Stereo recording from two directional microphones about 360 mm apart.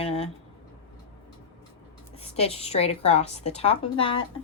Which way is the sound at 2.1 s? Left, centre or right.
Centre.